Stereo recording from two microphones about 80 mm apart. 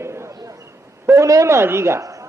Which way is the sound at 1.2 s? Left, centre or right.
Right.